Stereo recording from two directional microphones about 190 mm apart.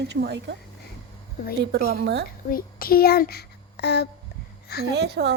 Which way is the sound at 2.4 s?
50° left (ahead or behind).